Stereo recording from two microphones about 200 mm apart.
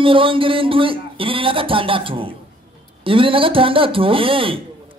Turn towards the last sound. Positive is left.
turn(degrees=-25)  # may be behind; listen again after turning